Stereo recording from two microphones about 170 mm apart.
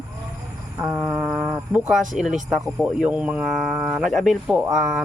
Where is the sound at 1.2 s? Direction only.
10° right (ahead or behind).